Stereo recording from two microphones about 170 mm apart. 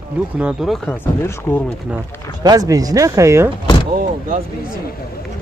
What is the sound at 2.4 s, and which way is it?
Speech, 20° right (ahead or behind).